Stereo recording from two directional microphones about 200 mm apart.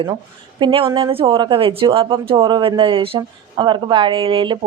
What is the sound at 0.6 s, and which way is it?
A woman's voice, 25° right (ahead or behind).